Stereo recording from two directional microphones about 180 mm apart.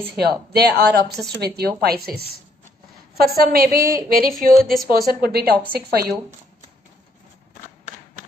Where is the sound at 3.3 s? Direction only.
55° right (ahead or behind).